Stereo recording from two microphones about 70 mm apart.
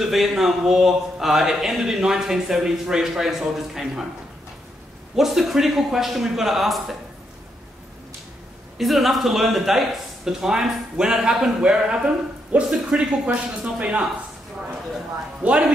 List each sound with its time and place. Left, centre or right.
0.0 s speech: centre
5.1 s speech: centre
8.7 s speech: centre
15.4 s speech: centre